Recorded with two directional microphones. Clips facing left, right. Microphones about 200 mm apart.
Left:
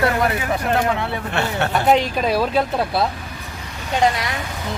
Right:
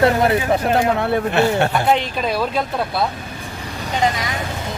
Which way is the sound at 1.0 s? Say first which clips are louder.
Right 7 dB; 50° right (ahead or behind).